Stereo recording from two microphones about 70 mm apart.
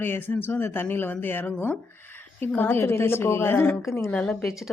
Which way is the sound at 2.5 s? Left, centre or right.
Left.